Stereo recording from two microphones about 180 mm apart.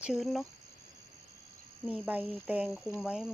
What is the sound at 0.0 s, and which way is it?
Speech, centre (ahead or behind).